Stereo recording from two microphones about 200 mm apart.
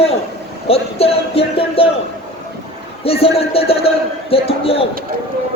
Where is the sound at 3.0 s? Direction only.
30° left (ahead or behind).